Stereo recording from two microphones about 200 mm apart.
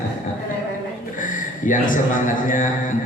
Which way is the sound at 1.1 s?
40° left (ahead or behind).